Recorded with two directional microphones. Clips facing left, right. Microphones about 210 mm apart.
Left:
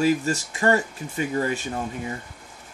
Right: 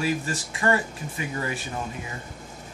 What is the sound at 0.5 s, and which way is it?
Speech, 30° left (ahead or behind).